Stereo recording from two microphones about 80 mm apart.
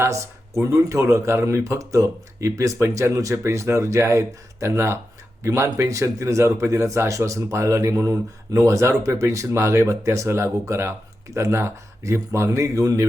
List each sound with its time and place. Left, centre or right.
0.0 s speech: right